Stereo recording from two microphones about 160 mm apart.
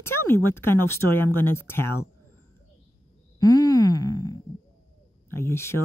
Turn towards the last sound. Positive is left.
turn(degrees=15)  # may be behind; listen again after turning